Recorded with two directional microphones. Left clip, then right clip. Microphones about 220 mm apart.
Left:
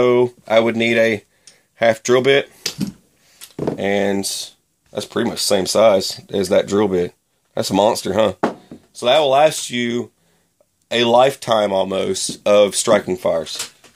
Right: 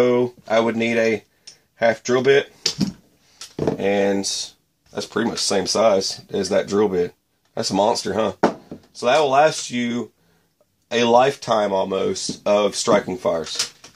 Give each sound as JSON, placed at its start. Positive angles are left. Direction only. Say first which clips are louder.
{"t": 0.0, "sound": "speech", "louder": "left 3 dB", "side_deg": 40}
{"t": 3.8, "sound": "speech", "louder": "left 1 dB", "side_deg": 40}